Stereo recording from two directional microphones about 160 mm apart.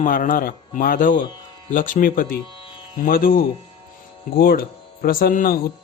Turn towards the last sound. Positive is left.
turn(degrees=65)  # may be behind; listen again after turning